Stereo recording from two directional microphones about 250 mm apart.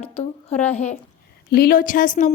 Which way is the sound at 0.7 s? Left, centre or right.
Left.